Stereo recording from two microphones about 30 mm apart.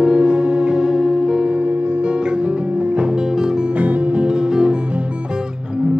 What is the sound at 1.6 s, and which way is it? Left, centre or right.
Music, right.